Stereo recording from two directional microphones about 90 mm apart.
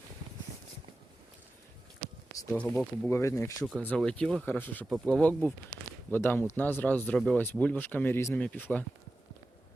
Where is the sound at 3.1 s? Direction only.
30° left (ahead or behind).